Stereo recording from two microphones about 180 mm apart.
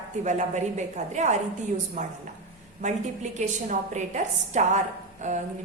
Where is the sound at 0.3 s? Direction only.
40° right (ahead or behind).